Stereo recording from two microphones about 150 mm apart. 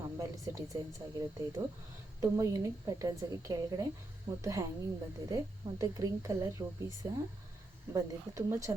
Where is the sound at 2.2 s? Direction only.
20° right (ahead or behind).